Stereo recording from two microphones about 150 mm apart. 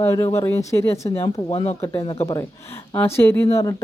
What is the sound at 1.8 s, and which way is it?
Speech, 15° left (ahead or behind).